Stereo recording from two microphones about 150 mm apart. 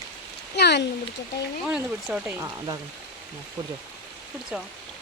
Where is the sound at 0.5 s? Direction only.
90° left.